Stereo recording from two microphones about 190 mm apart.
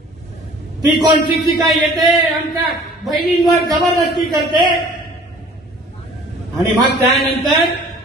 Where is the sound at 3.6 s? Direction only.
20° right (ahead or behind).